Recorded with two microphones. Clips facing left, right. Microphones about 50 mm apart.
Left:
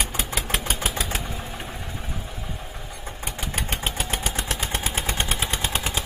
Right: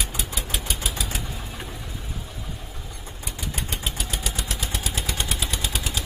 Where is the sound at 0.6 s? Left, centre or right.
Left.